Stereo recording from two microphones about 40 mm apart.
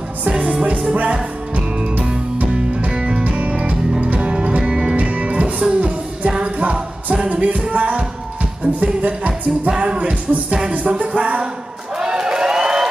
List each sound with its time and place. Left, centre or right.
0.3 s music: centre
0.9 s speech: right
2.9 s music: right
4.9 s music: right
8.7 s speech: right
9.7 s music: right
12.0 s a sound: right